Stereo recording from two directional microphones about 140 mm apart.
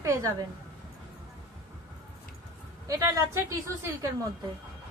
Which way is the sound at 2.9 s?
25° right (ahead or behind).